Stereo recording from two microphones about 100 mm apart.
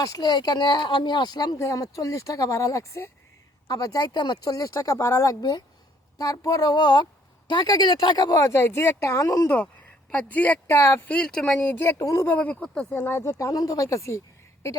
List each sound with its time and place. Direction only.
0.0 s speech: 40° left (ahead or behind)
1.5 s speech: 30° left (ahead or behind)
5.4 s speech: 45° left (ahead or behind)
10.1 s speech: 15° left (ahead or behind)
10.8 s speech: 25° left (ahead or behind)
11.1 s speech: 10° left (ahead or behind)
11.7 s speech: 25° left (ahead or behind)
12.3 s speech: 15° left (ahead or behind); by 14.2 s 30° left (ahead or behind)